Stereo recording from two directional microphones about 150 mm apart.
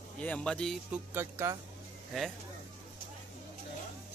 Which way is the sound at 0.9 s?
15° right (ahead or behind).